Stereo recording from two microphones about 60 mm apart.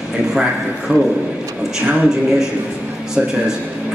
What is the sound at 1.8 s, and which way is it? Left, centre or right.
Speech, right.